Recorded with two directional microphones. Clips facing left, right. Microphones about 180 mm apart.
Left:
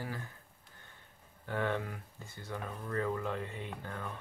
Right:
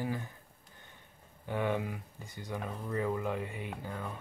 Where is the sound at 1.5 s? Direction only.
15° right (ahead or behind).